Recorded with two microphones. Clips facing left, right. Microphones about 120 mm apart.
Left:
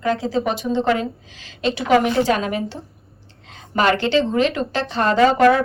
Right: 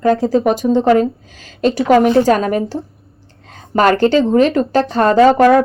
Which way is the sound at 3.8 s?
45° right (ahead or behind).